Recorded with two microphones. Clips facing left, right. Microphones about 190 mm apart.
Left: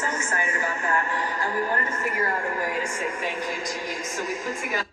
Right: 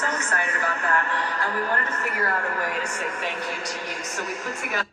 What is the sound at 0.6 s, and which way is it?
A man's voice, 15° left (ahead or behind).